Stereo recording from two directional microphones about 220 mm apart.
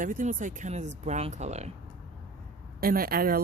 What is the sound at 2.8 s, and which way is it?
Speech, 40° right (ahead or behind).